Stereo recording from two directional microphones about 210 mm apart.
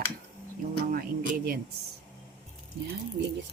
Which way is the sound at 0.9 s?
45° right (ahead or behind).